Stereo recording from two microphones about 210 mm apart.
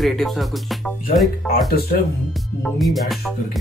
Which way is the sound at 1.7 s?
45° left (ahead or behind).